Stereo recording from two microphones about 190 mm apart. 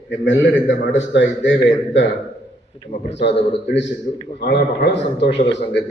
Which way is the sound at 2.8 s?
35° left (ahead or behind).